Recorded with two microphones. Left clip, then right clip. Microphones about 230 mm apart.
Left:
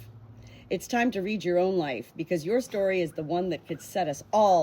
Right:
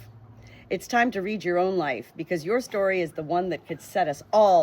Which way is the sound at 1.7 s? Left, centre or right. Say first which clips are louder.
Right 2 dB; right.